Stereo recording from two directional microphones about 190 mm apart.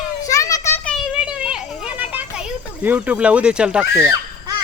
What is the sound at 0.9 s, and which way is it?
Children playing, 5° right (ahead or behind).